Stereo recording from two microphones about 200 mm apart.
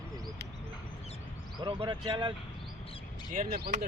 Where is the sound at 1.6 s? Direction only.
25° right (ahead or behind).